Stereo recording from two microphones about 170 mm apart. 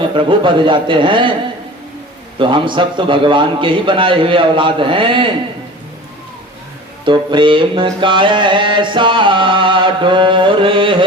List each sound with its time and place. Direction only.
0.0 s music: 30° right (ahead or behind)
2.4 s music: 30° right (ahead or behind)
7.0 s music: 30° right (ahead or behind)